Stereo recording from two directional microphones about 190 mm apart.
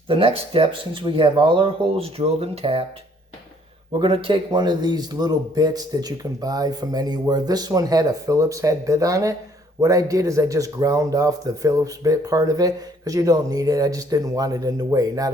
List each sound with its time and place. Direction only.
0.1 s a man's voice: 30° right (ahead or behind)
3.9 s a man's voice: 25° right (ahead or behind)